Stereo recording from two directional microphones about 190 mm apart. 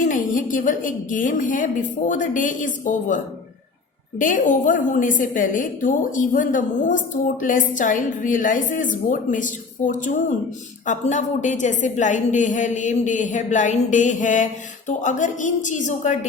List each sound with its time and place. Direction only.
0.0 s a woman's voice: 45° left (ahead or behind)
4.2 s a woman's voice: 40° left (ahead or behind)